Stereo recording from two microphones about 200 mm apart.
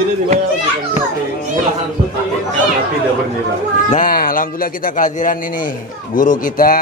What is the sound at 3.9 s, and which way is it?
A man's voice, 45° left (ahead or behind).